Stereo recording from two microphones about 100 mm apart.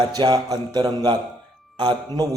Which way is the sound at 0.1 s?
40° right (ahead or behind).